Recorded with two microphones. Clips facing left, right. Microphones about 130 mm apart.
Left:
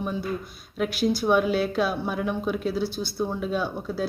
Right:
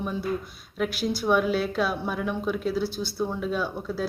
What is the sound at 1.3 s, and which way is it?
Speech, 5° left (ahead or behind).